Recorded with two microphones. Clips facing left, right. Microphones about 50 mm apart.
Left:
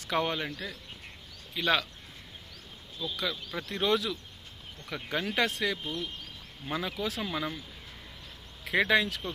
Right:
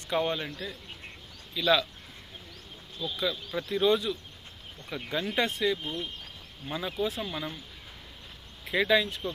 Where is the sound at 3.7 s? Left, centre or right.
Left.